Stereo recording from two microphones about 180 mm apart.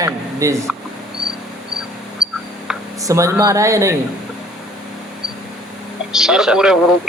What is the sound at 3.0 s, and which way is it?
Speech, 15° right (ahead or behind).